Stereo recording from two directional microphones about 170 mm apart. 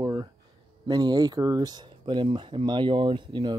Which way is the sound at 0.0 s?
20° right (ahead or behind).